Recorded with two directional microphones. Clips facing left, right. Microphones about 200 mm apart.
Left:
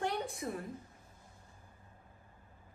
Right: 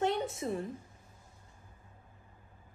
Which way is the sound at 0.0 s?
25° right (ahead or behind).